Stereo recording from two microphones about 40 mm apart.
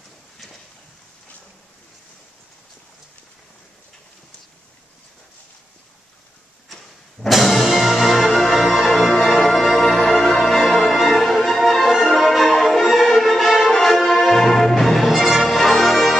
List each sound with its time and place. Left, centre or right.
6.7 s music: centre
15.0 s music: centre